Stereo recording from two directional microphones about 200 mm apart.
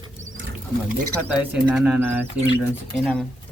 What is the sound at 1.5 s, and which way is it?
Speech, 5° right (ahead or behind).